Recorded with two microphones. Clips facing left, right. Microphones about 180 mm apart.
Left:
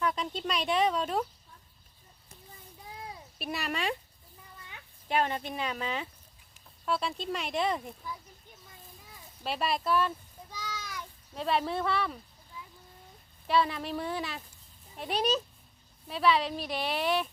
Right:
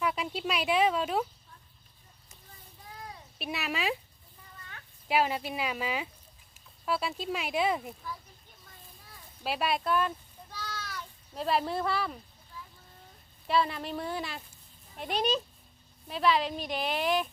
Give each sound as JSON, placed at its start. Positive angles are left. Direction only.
{"t": 0.0, "sound": "speech", "side_deg": -10}
{"t": 3.3, "sound": "a woman's voice", "side_deg": 0}
{"t": 5.0, "sound": "a woman's voice", "side_deg": -5}
{"t": 9.4, "sound": "a woman's voice", "side_deg": 0}
{"t": 10.5, "sound": "a sound", "side_deg": 10}
{"t": 11.3, "sound": "a woman's voice", "side_deg": 0}
{"t": 13.5, "sound": "a woman's voice", "side_deg": 0}
{"t": 16.0, "sound": "a woman's voice", "side_deg": 0}